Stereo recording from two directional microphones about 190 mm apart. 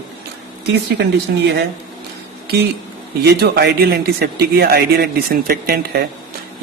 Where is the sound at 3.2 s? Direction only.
60° right (ahead or behind).